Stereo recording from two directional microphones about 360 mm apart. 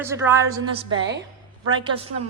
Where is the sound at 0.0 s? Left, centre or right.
Centre.